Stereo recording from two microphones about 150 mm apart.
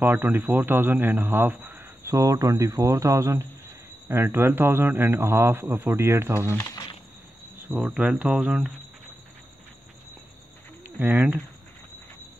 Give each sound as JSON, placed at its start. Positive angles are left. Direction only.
{"t": 0.0, "sound": "speech", "side_deg": -10}
{"t": 2.1, "sound": "speech", "side_deg": -25}
{"t": 6.6, "sound": "insect", "side_deg": 20}
{"t": 7.6, "sound": "speech", "side_deg": -5}
{"t": 11.0, "sound": "speech", "side_deg": -10}